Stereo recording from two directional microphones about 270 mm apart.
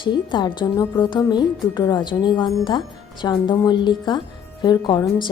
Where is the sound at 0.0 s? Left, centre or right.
Centre.